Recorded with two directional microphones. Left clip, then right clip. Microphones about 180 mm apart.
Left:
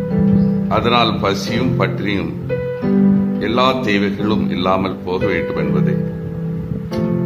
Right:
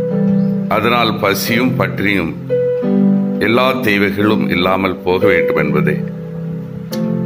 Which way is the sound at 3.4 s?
20° right (ahead or behind).